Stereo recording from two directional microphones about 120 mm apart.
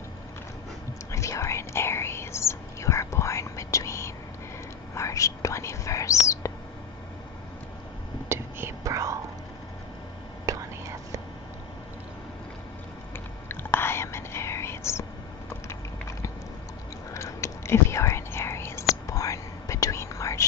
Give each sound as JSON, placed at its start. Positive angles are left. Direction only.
{"t": 1.1, "sound": "whispering", "side_deg": 25}
{"t": 8.3, "sound": "whispering", "side_deg": -20}
{"t": 10.5, "sound": "whispering", "side_deg": -30}
{"t": 13.5, "sound": "whispering", "side_deg": 20}
{"t": 15.7, "sound": "a sound", "side_deg": 25}
{"t": 17.1, "sound": "whispering", "side_deg": 25}